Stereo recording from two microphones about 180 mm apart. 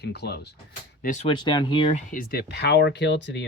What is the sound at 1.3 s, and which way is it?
Speech, 25° left (ahead or behind).